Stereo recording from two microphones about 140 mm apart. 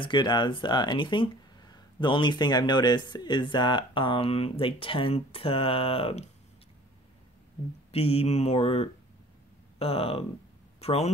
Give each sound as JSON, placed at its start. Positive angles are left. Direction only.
{"t": 0.0, "sound": "speech", "side_deg": 35}
{"t": 7.9, "sound": "speech", "side_deg": 45}